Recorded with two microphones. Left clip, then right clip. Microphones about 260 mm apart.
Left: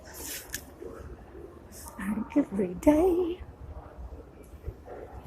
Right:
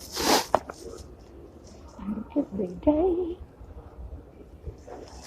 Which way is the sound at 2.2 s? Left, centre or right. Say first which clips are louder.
Left 1 dB; left.